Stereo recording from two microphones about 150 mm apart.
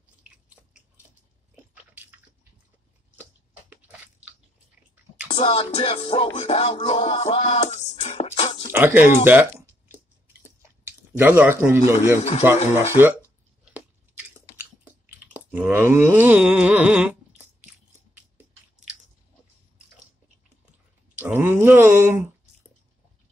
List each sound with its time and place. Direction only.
1.5 s biting: 10° right (ahead or behind)
3.7 s biting: 10° right (ahead or behind)
4.9 s chewing: 10° right (ahead or behind)
5.3 s music: 35° left (ahead or behind)
8.7 s a sound: 10° right (ahead or behind)
12.2 s speech: 45° left (ahead or behind)
13.7 s chewing: 10° right (ahead or behind)
21.2 s a sound: 15° right (ahead or behind)